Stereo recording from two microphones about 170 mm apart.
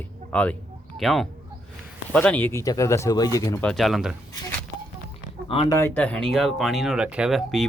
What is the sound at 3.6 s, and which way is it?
Speech, 5° left (ahead or behind).